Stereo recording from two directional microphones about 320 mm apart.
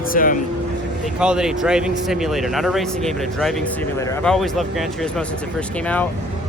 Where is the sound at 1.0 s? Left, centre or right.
Centre.